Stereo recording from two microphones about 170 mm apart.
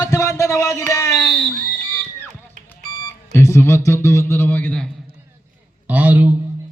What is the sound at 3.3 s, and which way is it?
A man's voice, 15° left (ahead or behind).